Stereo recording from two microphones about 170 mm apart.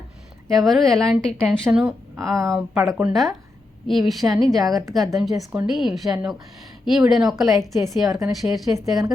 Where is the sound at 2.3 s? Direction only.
20° right (ahead or behind).